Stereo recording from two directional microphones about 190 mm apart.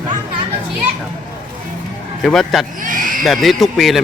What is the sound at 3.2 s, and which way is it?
Speech, centre (ahead or behind).